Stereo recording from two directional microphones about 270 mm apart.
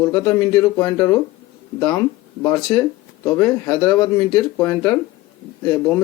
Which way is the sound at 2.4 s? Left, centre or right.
Centre.